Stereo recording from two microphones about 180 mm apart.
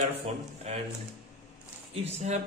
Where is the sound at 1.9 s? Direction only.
40° right (ahead or behind).